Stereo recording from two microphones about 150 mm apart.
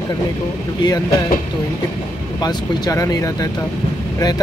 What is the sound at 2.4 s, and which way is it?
Speech, 25° left (ahead or behind).